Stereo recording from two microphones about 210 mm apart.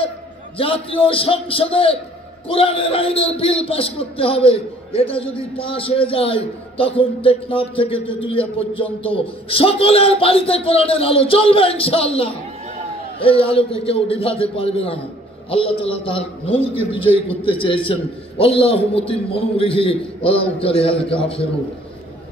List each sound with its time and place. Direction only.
0.6 s a man's voice: 25° left (ahead or behind)